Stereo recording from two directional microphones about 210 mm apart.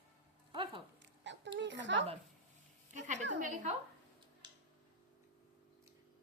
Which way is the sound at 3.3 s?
35° right (ahead or behind).